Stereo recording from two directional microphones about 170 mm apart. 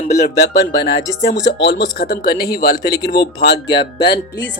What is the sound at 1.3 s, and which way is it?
Speech, 85° left.